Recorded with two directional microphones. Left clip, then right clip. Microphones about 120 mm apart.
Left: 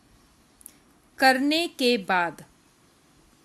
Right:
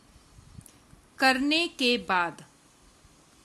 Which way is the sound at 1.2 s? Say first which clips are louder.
Left 3 dB; 30° left (ahead or behind).